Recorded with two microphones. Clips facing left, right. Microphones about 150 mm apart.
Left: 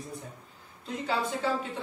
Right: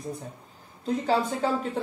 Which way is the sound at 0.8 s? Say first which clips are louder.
Right 6 dB; 40° right (ahead or behind).